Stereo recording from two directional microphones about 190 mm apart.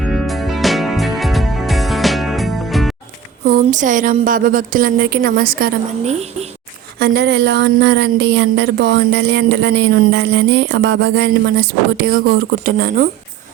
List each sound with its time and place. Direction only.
0.0 s music: centre (ahead or behind)
3.4 s a woman's voice: 45° right (ahead or behind)
6.1 s a woman's voice: 35° right (ahead or behind)
7.0 s speech: 55° right (ahead or behind)